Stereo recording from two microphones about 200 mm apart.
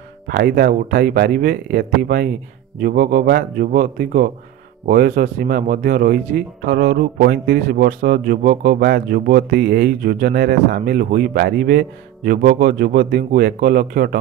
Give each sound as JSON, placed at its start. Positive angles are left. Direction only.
{"t": 0.3, "sound": "speech", "side_deg": -50}